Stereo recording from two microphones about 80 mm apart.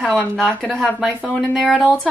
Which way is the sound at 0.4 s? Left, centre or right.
Centre.